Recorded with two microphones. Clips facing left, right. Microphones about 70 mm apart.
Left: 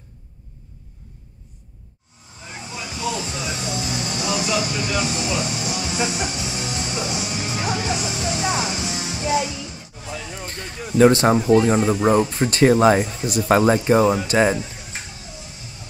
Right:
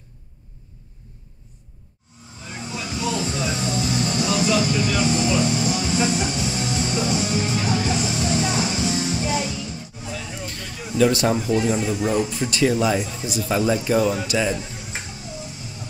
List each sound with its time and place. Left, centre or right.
2.5 s vehicle: centre
5.2 s music: centre
10.3 s a sound: left
11.0 s speech: left
13.8 s speech: left